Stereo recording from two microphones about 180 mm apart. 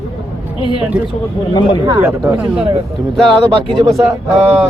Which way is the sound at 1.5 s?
25° left (ahead or behind).